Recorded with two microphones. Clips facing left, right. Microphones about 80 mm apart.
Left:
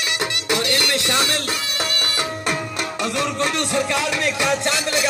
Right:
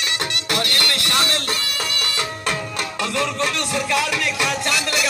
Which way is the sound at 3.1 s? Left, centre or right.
Left.